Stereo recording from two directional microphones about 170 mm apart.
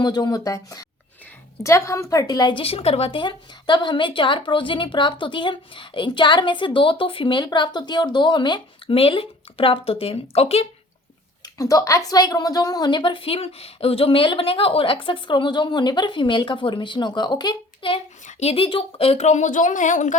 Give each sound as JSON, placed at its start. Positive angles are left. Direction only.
{"t": 0.0, "sound": "a woman's voice", "side_deg": 25}
{"t": 11.4, "sound": "a woman's voice", "side_deg": 20}
{"t": 18.3, "sound": "speech", "side_deg": 40}